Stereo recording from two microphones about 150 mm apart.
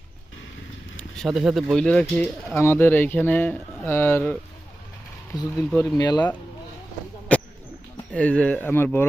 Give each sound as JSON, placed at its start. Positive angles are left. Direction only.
{"t": 1.1, "sound": "speech", "side_deg": 0}
{"t": 5.5, "sound": "speech", "side_deg": 15}
{"t": 7.3, "sound": "a sound", "side_deg": 10}
{"t": 8.1, "sound": "speech", "side_deg": 10}